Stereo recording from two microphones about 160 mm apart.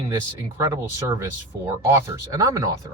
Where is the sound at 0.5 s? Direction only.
20° right (ahead or behind).